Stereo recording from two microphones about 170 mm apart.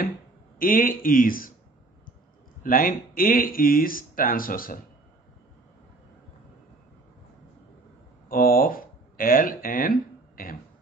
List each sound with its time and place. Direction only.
0.6 s speech: 55° left (ahead or behind)
2.6 s speech: 55° left (ahead or behind)
8.3 s speech: 60° left (ahead or behind)